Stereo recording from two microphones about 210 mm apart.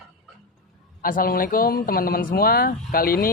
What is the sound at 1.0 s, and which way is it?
Speech, 45° left (ahead or behind).